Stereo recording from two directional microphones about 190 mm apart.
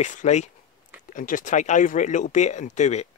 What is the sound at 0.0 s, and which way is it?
Speech, 40° left (ahead or behind).